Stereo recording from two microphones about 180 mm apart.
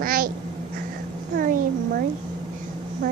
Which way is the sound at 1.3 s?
55° right (ahead or behind).